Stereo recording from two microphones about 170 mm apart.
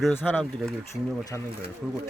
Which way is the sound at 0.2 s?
5° left (ahead or behind).